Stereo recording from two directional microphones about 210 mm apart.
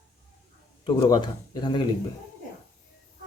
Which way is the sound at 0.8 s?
20° left (ahead or behind).